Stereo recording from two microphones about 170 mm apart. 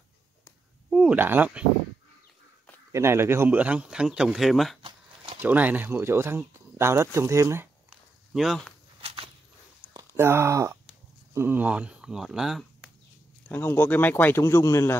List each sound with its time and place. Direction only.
0.8 s speech: 5° right (ahead or behind)
2.9 s speech: 15° right (ahead or behind)
8.3 s speech: centre (ahead or behind)
9.0 s walk: 35° right (ahead or behind)
9.9 s speech: 15° right (ahead or behind)
13.5 s speech: 10° left (ahead or behind)